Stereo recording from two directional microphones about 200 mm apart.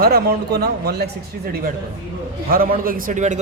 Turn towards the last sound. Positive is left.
turn(degrees=-40)  # may be behind; listen again after turning